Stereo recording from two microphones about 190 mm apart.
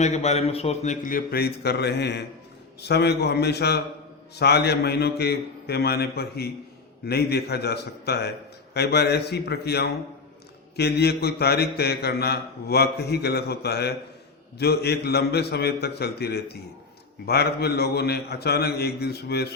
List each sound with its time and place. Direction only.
0.0 s a man's voice: 35° left (ahead or behind); by 19.5 s 60° left (ahead or behind)